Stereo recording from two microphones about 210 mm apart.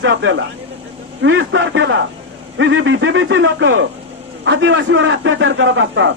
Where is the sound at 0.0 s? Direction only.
65° right (ahead or behind).